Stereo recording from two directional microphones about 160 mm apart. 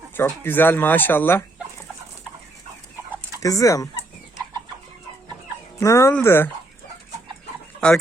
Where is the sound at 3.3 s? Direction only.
20° left (ahead or behind).